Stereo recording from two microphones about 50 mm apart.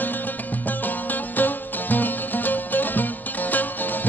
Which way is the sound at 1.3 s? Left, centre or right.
Left.